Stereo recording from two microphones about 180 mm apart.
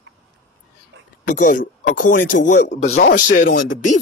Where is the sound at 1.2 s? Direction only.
50° left (ahead or behind).